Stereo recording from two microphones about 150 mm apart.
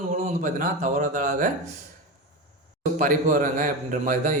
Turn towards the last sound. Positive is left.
turn(degrees=-60)  # may be behind; listen again after turning